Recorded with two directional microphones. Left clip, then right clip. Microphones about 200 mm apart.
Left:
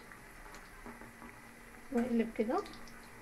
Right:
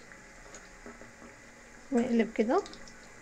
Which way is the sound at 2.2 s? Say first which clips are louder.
Right 6 dB; 55° right (ahead or behind).